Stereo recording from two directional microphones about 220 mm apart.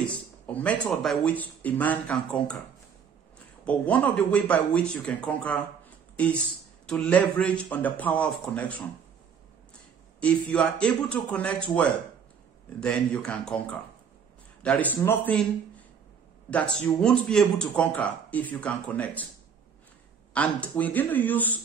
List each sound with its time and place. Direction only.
0.5 s speech: 5° left (ahead or behind)
3.6 s speech: 5° left (ahead or behind)
10.2 s speech: 5° left (ahead or behind)
16.4 s speech: 5° left (ahead or behind)
20.3 s speech: 5° left (ahead or behind)